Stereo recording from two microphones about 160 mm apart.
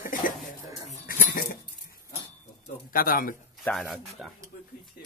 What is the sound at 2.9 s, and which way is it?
Speech, 60° left (ahead or behind).